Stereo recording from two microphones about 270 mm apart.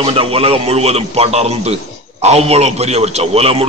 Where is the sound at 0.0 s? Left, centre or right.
Right.